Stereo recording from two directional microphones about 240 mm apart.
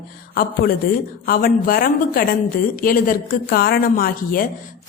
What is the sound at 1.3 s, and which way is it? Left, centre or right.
A woman's voice, left.